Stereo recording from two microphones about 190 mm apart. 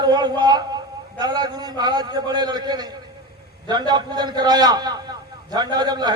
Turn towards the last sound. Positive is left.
turn(degrees=-20)  # may be behind; listen again after turning